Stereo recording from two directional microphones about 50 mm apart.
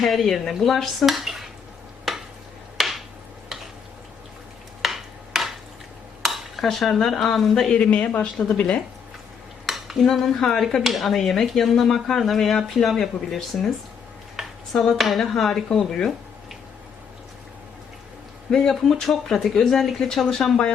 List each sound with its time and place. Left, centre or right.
0.0 s speech: centre
2.1 s stir: centre
2.7 s a sound: centre
4.8 s a sound: centre
6.2 s cutlery: centre
7.7 s speech: left
9.6 s dishes: centre
10.1 s speech: centre
14.4 s a sound: centre
14.9 s speech: centre
18.5 s speech: centre